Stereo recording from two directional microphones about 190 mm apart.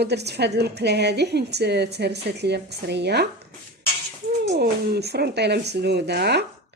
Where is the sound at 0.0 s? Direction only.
60° right (ahead or behind).